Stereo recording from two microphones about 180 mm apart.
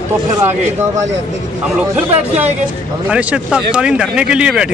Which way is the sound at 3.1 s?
5° right (ahead or behind).